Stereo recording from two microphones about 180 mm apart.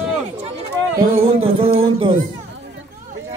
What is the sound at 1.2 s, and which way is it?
Music, 30° right (ahead or behind).